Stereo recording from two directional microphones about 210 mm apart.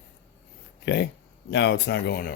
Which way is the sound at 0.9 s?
55° left (ahead or behind).